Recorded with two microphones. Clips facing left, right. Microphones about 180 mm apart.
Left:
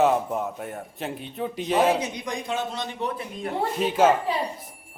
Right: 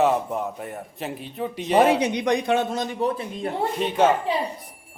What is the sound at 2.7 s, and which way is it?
Speech, 45° right (ahead or behind).